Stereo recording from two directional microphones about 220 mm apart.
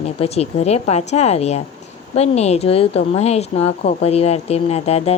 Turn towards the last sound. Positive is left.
turn(degrees=30)  # may be behind; listen again after turning